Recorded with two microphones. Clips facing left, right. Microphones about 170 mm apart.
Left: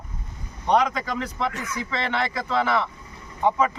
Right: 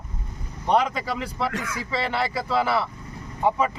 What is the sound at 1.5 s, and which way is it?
Speech, 90° right.